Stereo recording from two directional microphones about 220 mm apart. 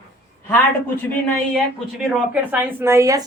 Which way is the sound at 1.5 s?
Centre (ahead or behind).